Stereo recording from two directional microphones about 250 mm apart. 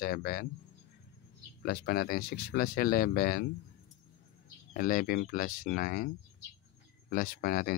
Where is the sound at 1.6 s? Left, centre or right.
Left.